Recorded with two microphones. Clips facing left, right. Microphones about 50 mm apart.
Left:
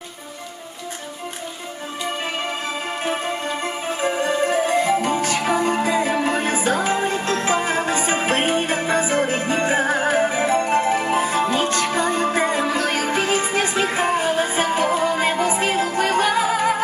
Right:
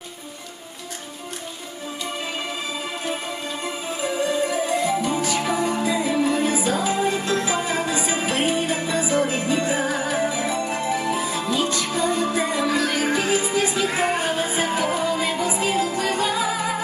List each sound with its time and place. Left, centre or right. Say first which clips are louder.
3.0 s music: left 4 dB; left